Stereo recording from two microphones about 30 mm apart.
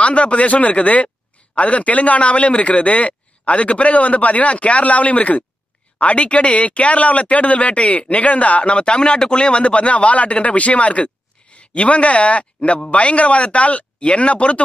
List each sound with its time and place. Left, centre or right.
0.0 s a man's voice: left
8.9 s a man's voice: left